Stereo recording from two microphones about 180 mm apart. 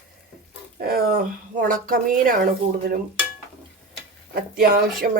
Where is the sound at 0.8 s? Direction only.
55° right (ahead or behind).